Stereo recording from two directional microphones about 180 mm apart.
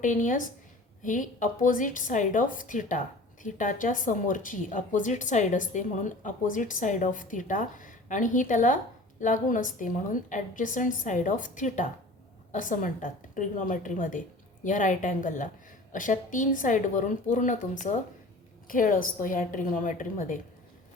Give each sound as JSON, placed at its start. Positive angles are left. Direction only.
{"t": 0.0, "sound": "a woman's voice", "side_deg": 45}